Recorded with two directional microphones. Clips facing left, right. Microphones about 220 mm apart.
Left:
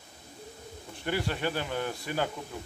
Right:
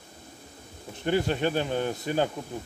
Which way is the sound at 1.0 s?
20° right (ahead or behind).